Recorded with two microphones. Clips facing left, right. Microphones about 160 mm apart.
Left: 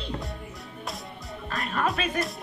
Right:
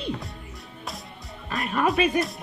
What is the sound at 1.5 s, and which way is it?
Speech, 15° right (ahead or behind).